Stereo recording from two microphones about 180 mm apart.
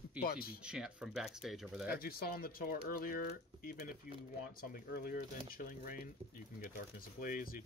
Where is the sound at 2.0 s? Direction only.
55° left (ahead or behind).